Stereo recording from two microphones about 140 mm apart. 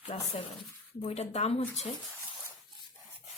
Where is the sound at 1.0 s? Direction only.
50° left (ahead or behind).